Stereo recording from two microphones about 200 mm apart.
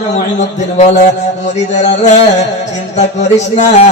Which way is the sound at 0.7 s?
35° left (ahead or behind).